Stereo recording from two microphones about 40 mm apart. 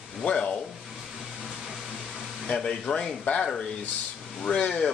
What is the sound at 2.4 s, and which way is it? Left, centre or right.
Speech, left.